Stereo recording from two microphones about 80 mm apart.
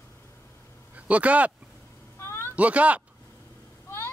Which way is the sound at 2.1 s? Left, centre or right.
Left.